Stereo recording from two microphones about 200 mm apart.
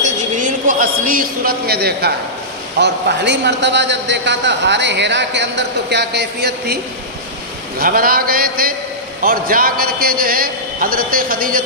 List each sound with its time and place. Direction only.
0.0 s a sound: 40° right (ahead or behind)
2.7 s a man's voice: 55° right (ahead or behind)
7.8 s a man's voice: 45° right (ahead or behind)